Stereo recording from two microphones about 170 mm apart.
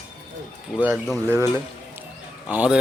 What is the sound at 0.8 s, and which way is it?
Speech, 10° right (ahead or behind).